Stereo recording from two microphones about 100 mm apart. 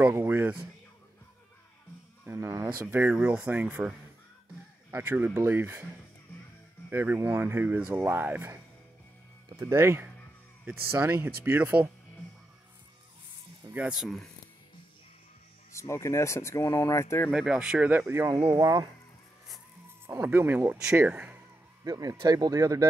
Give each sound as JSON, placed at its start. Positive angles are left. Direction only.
{"t": 0.1, "sound": "speech", "side_deg": -20}
{"t": 2.2, "sound": "speech", "side_deg": -30}
{"t": 4.9, "sound": "speech", "side_deg": -20}
{"t": 6.9, "sound": "speech", "side_deg": -25}
{"t": 9.6, "sound": "speech", "side_deg": -30}
{"t": 13.7, "sound": "speech", "side_deg": -10}
{"t": 15.7, "sound": "speech", "side_deg": 30}
{"t": 17.3, "sound": "speech", "side_deg": -5}
{"t": 18.5, "sound": "speech", "side_deg": -35}
{"t": 20.1, "sound": "speech", "side_deg": -20}
{"t": 21.8, "sound": "speech", "side_deg": -40}